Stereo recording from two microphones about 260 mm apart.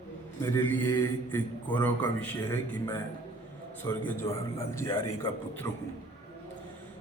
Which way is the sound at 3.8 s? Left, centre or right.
Centre.